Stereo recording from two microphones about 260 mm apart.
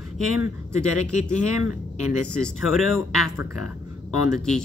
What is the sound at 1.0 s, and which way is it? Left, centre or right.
Speech, centre.